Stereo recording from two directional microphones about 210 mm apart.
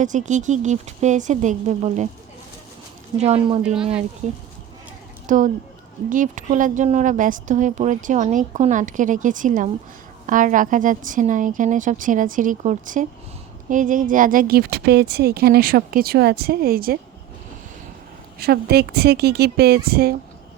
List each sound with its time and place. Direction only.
0.0 s a woman's voice: 35° right (ahead or behind)
3.2 s speech: 30° right (ahead or behind)
3.6 s speech: 5° right (ahead or behind)
5.2 s a woman's voice: 40° right (ahead or behind)
18.3 s speech: 50° right (ahead or behind)